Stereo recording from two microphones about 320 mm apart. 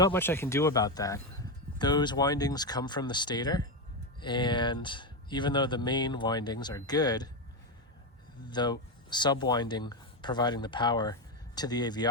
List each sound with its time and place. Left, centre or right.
0.0 s speech: centre
8.4 s speech: centre